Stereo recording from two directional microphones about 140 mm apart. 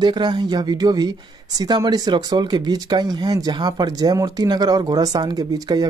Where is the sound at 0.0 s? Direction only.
30° right (ahead or behind).